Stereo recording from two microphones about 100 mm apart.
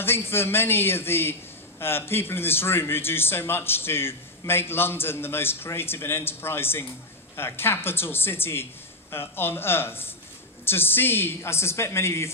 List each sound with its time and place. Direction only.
0.0 s a man's voice: 25° left (ahead or behind)